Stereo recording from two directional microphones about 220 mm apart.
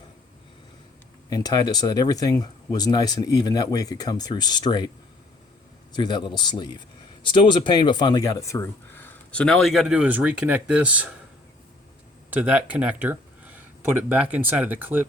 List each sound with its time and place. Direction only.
1.3 s a man's voice: 20° left (ahead or behind)
5.9 s a man's voice: 20° left (ahead or behind); by 11.1 s 5° right (ahead or behind)
12.3 s speech: 5° right (ahead or behind)